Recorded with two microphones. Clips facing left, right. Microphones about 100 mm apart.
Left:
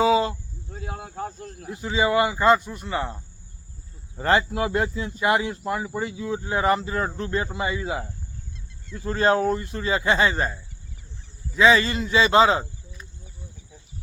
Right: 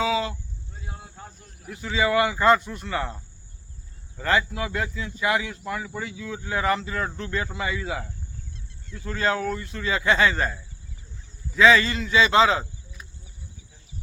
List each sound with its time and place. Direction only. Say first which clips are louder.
0.0 s a sound: left 5 dB; 35° left (ahead or behind)
0.7 s cricket: left 9 dB; 65° left (ahead or behind)
1.6 s speech: left 1 dB; 25° left (ahead or behind)
4.2 s speech: left 3 dB; 35° left (ahead or behind)